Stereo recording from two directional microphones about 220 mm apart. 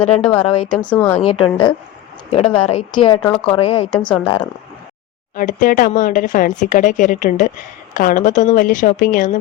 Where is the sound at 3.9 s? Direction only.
5° left (ahead or behind).